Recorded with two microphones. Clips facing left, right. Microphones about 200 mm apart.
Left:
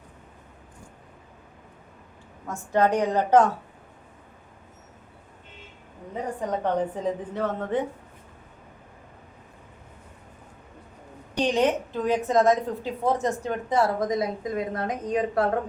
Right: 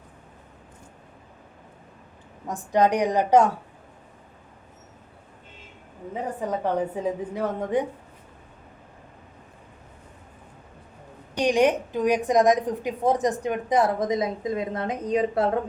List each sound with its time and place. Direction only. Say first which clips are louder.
2.5 s a woman's voice: right 1 dB; 15° right (ahead or behind)
6.5 s a woman's voice: even; 10° right (ahead or behind)
11.3 s a woman's voice: right 2 dB; 15° right (ahead or behind)